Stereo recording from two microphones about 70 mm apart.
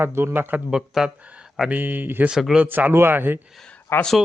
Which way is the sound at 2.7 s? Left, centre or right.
Right.